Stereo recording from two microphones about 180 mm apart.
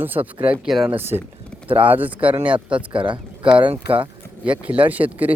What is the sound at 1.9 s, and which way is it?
Speech, 10° right (ahead or behind).